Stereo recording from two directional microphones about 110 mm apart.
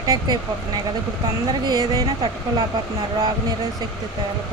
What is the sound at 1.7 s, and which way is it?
Speech, 35° right (ahead or behind).